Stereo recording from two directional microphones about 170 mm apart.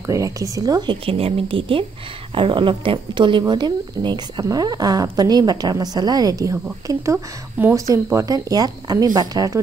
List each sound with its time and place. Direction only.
0.0 s speech: 20° right (ahead or behind)